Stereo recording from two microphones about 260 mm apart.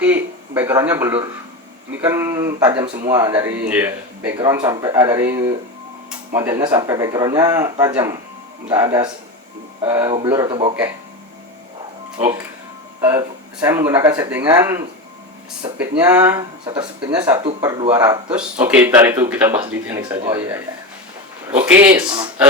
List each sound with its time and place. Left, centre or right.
0.0 s a man's voice: centre
12.1 s speech: right
13.0 s speech: centre